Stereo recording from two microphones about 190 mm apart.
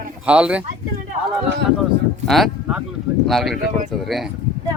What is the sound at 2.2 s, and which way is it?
Speech, centre (ahead or behind).